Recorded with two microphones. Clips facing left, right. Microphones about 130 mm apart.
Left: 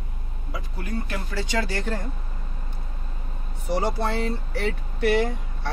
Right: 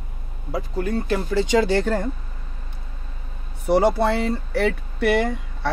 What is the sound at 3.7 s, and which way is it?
Speech, 60° right (ahead or behind).